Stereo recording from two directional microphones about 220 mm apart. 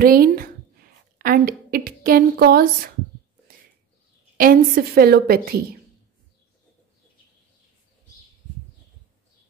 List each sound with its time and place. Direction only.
0.0 s a woman's voice: 40° right (ahead or behind)
4.4 s a woman's voice: 40° right (ahead or behind)